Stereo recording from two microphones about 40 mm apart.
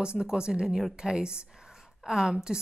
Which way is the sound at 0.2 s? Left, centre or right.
Centre.